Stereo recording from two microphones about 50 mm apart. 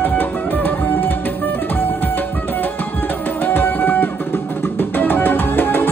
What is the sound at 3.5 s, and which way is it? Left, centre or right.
Music, left.